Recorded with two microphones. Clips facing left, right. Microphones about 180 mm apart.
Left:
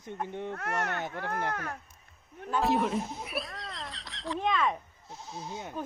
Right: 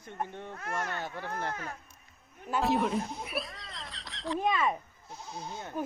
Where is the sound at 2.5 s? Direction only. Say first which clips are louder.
Left 1 dB; centre (ahead or behind).